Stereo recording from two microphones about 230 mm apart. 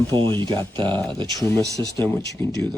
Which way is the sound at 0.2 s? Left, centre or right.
Right.